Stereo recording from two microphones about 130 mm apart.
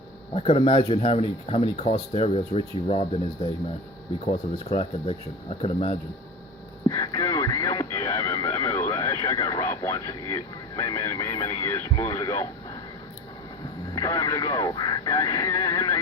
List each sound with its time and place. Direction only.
0.3 s speech: 50° left (ahead or behind)
6.8 s radio: 30° left (ahead or behind)
13.9 s speech: 25° left (ahead or behind)